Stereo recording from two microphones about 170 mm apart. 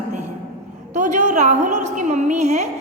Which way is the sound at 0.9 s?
45° right (ahead or behind).